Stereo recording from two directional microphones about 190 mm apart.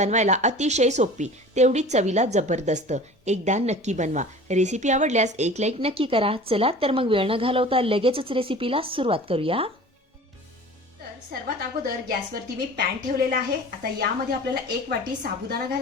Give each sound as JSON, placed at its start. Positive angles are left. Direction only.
{"t": 0.0, "sound": "a woman's voice", "side_deg": -40}
{"t": 11.3, "sound": "a woman's voice", "side_deg": -50}
{"t": 14.8, "sound": "a woman's voice", "side_deg": -50}